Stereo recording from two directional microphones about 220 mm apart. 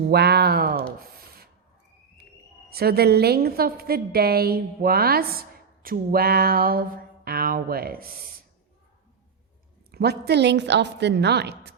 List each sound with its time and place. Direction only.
0.1 s a woman's voice: 45° right (ahead or behind)
2.6 s a woman's voice: 45° right (ahead or behind)
9.9 s a woman's voice: 45° right (ahead or behind)